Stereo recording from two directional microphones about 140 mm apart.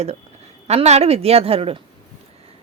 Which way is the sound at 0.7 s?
50° right (ahead or behind).